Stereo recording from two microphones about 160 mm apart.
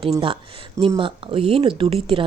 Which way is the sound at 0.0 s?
35° right (ahead or behind).